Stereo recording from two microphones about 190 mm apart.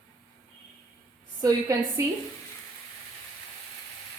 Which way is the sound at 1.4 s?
20° right (ahead or behind).